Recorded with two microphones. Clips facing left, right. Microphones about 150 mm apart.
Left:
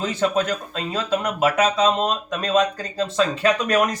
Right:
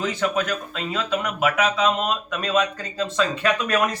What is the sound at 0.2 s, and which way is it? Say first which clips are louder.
Speech: left 2 dB; 35° left (ahead or behind).